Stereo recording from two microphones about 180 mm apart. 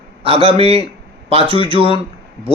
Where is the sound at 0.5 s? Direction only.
30° right (ahead or behind).